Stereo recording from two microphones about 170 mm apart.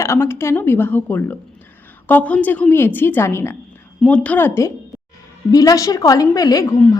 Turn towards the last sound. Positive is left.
turn(degrees=20)  # may be behind; listen again after turning